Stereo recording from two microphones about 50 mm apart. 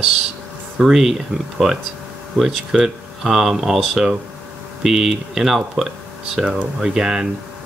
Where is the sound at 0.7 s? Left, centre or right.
Centre.